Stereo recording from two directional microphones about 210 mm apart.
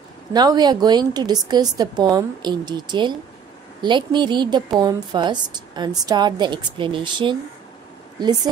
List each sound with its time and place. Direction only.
0.3 s a woman's voice: 20° right (ahead or behind)